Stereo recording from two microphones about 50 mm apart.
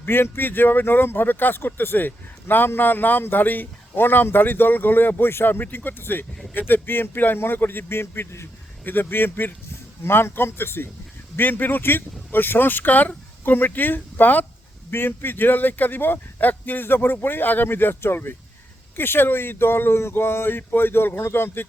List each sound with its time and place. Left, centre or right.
0.0 s speech: left
11.3 s speech: left